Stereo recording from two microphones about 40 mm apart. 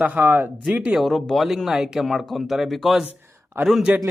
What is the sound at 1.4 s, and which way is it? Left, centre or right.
Speech, centre.